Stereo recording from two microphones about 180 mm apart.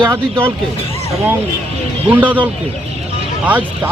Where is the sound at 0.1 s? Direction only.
10° right (ahead or behind).